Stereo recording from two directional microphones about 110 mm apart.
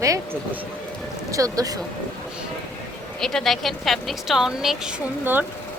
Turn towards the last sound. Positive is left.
turn(degrees=-20)  # may be behind; listen again after turning